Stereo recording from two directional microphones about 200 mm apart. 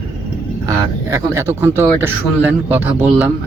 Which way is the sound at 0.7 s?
15° right (ahead or behind).